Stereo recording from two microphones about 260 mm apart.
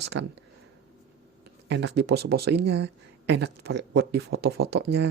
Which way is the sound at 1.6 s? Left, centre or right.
Right.